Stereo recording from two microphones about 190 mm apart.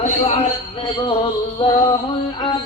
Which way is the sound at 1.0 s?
25° left (ahead or behind).